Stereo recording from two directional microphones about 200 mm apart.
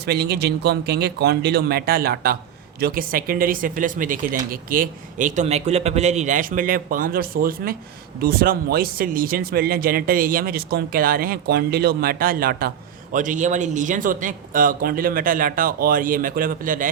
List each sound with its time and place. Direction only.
0.0 s speech: 55° right (ahead or behind)